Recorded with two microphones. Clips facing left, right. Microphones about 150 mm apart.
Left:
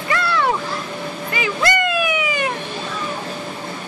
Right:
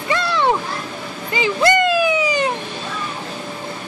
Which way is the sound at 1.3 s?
25° right (ahead or behind).